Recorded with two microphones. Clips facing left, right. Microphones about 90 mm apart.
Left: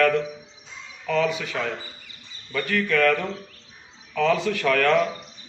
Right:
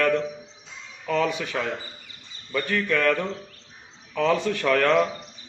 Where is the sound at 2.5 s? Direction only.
25° right (ahead or behind).